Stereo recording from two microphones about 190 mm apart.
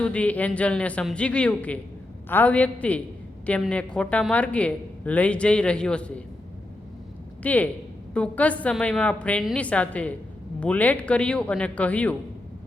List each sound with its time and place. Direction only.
0.0 s a woman's voice: 5° left (ahead or behind)
7.4 s a woman's voice: 10° left (ahead or behind)